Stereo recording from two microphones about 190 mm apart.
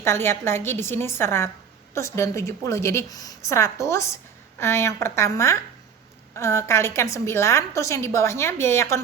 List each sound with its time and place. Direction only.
0.0 s a woman's voice: 15° left (ahead or behind)